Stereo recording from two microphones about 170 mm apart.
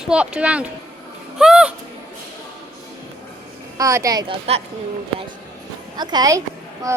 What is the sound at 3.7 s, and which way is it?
Speech, 20° right (ahead or behind).